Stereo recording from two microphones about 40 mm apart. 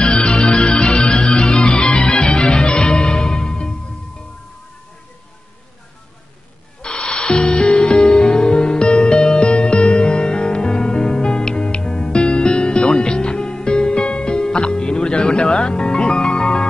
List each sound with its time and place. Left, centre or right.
0.0 s music: left
6.8 s music: left